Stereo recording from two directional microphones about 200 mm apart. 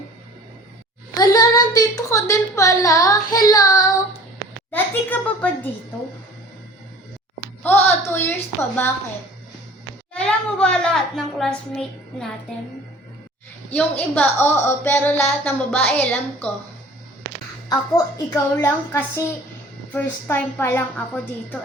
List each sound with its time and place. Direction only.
1.1 s a woman's voice: 20° left (ahead or behind)
4.7 s a child's voice: 5° left (ahead or behind)
7.6 s speech: 10° left (ahead or behind)
10.2 s a child's voice: 5° left (ahead or behind)
14.2 s speech: 10° left (ahead or behind)
17.7 s speech: 20° left (ahead or behind)